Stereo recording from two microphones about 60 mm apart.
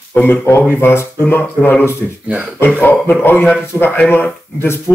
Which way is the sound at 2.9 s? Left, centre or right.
Left.